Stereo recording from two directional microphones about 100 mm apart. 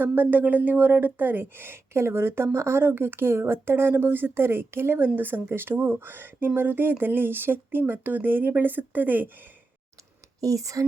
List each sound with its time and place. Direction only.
0.0 s speech: 20° right (ahead or behind)
10.4 s speech: 35° right (ahead or behind)